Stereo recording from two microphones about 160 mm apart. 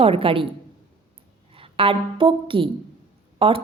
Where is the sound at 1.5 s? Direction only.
35° right (ahead or behind).